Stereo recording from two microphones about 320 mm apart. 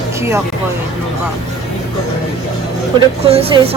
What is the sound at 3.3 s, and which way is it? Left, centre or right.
Speech, centre.